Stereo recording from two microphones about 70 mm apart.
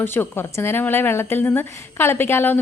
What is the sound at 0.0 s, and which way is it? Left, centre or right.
A woman's voice, left.